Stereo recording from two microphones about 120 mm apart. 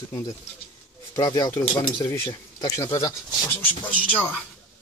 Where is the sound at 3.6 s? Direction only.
10° left (ahead or behind).